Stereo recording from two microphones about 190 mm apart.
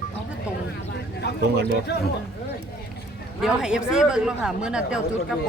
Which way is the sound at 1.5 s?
55° right (ahead or behind).